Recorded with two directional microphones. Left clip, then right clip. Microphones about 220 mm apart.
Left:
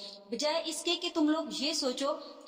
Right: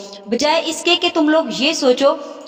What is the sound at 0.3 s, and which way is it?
A woman's voice, 40° right (ahead or behind).